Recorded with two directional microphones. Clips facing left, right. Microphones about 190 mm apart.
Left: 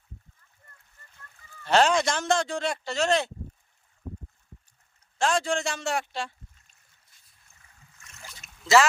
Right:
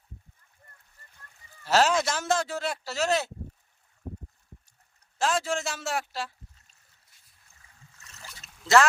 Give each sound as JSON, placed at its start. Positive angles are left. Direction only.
{"t": 1.6, "sound": "speech", "side_deg": -5}
{"t": 5.1, "sound": "speech", "side_deg": -5}
{"t": 7.9, "sound": "boat", "side_deg": -35}
{"t": 8.4, "sound": "boat", "side_deg": 0}